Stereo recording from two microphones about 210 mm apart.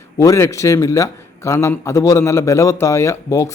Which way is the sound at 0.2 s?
15° left (ahead or behind).